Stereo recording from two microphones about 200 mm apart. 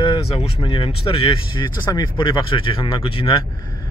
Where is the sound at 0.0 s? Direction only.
25° left (ahead or behind).